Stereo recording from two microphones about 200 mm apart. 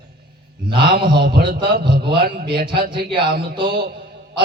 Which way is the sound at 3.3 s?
50° right (ahead or behind).